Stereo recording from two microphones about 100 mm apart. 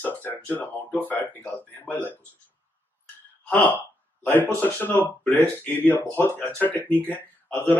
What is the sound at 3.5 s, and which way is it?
Speech, 15° left (ahead or behind).